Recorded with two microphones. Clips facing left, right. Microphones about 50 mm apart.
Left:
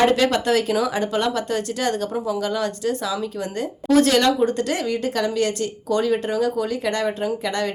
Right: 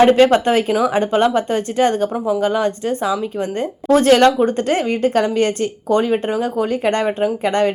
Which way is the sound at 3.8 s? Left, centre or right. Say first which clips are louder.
Right 5 dB; right.